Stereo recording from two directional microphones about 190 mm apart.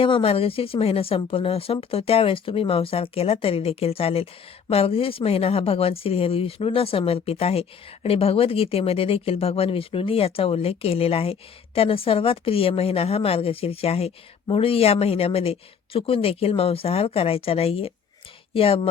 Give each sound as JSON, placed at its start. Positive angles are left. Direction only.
{"t": 0.0, "sound": "speech", "side_deg": 30}